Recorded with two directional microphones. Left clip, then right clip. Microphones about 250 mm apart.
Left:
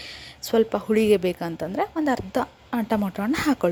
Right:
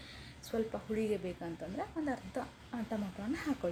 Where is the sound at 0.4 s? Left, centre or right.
Left.